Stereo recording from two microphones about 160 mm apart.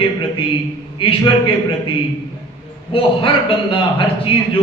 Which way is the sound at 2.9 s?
35° left (ahead or behind).